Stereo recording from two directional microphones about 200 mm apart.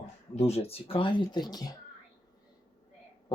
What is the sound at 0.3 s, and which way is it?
Speech, 30° left (ahead or behind).